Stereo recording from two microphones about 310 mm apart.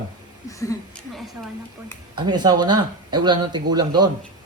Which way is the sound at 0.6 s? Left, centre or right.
Centre.